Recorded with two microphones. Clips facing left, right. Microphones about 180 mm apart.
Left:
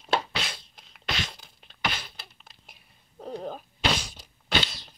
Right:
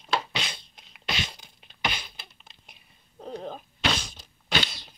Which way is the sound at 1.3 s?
Centre (ahead or behind).